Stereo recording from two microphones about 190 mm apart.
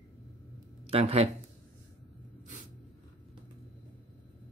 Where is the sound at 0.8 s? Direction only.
30° right (ahead or behind).